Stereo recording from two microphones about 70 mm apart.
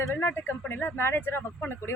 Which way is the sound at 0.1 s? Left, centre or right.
Left.